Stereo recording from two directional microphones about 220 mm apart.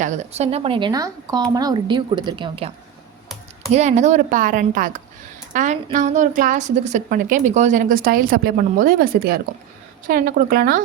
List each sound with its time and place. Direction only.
0.0 s a woman's voice: 30° right (ahead or behind)